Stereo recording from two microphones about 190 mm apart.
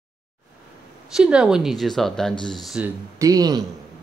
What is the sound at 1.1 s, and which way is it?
Speech, 5° right (ahead or behind).